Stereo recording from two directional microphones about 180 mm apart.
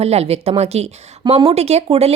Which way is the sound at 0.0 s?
35° right (ahead or behind).